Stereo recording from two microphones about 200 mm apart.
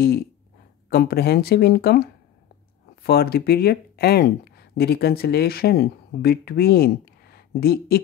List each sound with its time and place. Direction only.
0.8 s speech: 50° left (ahead or behind)